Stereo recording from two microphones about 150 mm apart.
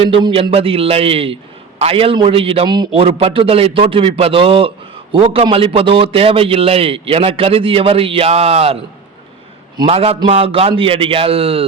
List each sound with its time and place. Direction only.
0.0 s a man's voice: 35° right (ahead or behind)
9.8 s a man's voice: 40° right (ahead or behind)